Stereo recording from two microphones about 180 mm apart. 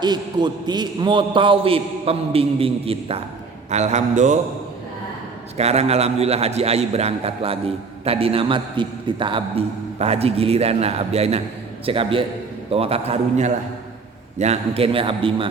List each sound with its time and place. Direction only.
0.0 s a man's voice: 25° right (ahead or behind); by 4.4 s 40° right (ahead or behind)
5.5 s a man's voice: 35° right (ahead or behind)